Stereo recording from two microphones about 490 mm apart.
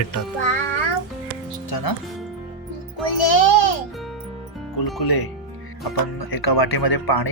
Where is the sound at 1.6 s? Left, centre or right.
Left.